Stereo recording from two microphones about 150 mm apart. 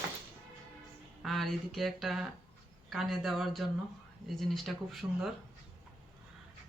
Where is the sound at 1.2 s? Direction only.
Centre (ahead or behind).